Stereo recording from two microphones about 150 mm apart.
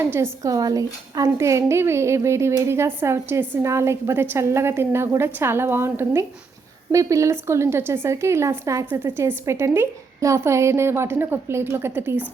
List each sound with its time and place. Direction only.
0.0 s a woman's voice: 15° right (ahead or behind)